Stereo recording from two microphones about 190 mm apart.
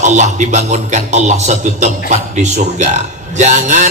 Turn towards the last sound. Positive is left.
turn(degrees=-40)  # may be behind; listen again after turning